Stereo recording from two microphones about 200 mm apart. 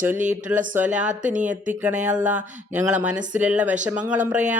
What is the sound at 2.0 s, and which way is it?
Speech, 5° right (ahead or behind).